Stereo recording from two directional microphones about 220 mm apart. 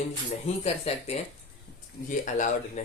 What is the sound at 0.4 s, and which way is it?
Speech, 30° left (ahead or behind).